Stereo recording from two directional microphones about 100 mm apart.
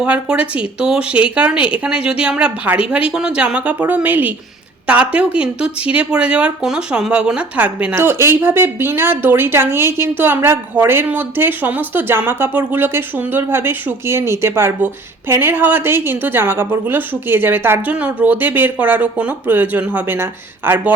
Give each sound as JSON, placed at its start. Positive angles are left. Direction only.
{"t": 0.0, "sound": "speech", "side_deg": -10}
{"t": 7.9, "sound": "speech", "side_deg": -25}